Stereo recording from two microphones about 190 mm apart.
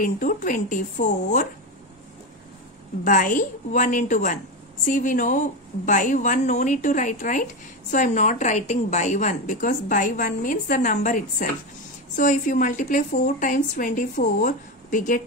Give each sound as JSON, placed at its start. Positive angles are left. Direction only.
{"t": 0.0, "sound": "a woman's voice", "side_deg": 45}
{"t": 3.0, "sound": "a woman's voice", "side_deg": 45}